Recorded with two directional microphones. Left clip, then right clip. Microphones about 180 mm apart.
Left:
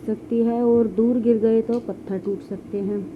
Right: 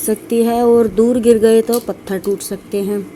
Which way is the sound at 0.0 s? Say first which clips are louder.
Right 8 dB; 25° right (ahead or behind).